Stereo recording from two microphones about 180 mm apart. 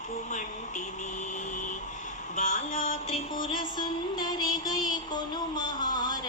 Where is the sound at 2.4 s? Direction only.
45° left (ahead or behind).